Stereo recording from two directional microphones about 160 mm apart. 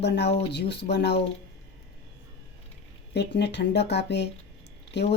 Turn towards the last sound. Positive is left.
turn(degrees=90)